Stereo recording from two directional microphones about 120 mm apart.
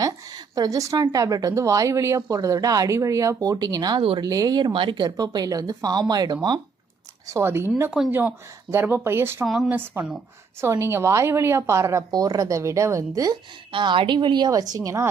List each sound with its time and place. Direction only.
0.0 s a sound: 30° right (ahead or behind)
1.1 s speech: 30° right (ahead or behind)
7.3 s speech: 20° right (ahead or behind)
13.7 s speech: 45° right (ahead or behind); by 15.1 s 25° right (ahead or behind)